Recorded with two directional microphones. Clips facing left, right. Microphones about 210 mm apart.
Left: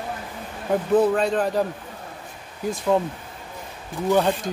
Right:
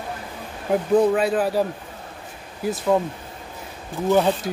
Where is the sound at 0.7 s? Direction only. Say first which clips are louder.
Right 1 dB; 10° right (ahead or behind).